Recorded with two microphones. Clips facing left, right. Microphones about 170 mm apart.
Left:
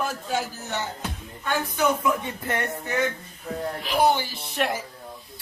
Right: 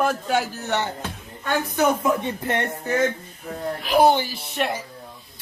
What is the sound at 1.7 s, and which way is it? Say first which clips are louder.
Speech: right 3 dB; 45° right (ahead or behind).